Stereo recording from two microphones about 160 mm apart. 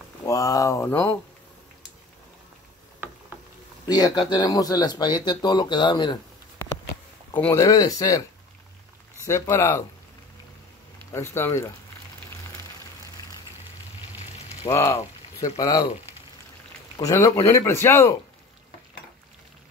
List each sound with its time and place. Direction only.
0.2 s speech: 20° left (ahead or behind)
3.8 s speech: 25° left (ahead or behind)
7.3 s speech: 15° left (ahead or behind)
9.2 s speech: 15° left (ahead or behind)
11.3 s speech: 15° left (ahead or behind)
14.7 s speech: 15° left (ahead or behind)
17.0 s speech: 20° left (ahead or behind)